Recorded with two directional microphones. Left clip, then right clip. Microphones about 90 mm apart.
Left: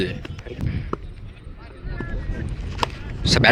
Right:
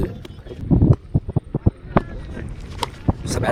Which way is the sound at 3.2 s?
30° right (ahead or behind).